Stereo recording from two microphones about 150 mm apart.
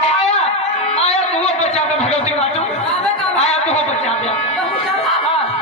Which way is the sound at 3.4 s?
45° left (ahead or behind).